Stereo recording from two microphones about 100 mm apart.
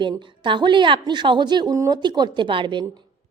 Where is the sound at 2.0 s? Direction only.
45° right (ahead or behind).